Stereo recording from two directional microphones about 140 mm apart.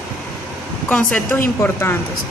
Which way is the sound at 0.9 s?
5° left (ahead or behind).